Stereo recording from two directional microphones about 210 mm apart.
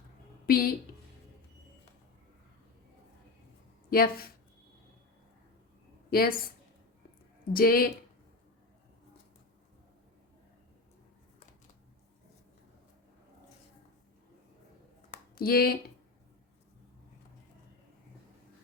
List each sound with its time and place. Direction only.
0.4 s speech: 45° left (ahead or behind)
3.8 s speech: 45° left (ahead or behind)
6.1 s speech: 45° left (ahead or behind)
7.5 s speech: 45° left (ahead or behind)
15.1 s a sound: 45° left (ahead or behind)